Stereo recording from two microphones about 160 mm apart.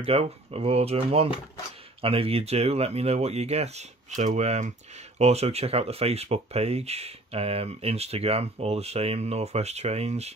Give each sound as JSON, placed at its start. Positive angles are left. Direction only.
{"t": 0.0, "sound": "speech", "side_deg": -40}